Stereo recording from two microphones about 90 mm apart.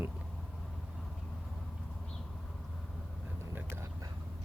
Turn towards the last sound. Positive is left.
turn(degrees=-30)  # may be behind; listen again after turning